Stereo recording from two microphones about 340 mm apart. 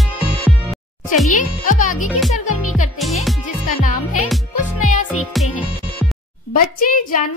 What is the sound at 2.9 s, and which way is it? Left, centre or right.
Music, centre.